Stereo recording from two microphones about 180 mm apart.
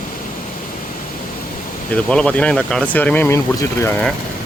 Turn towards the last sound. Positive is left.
turn(degrees=15)  # may be behind; listen again after turning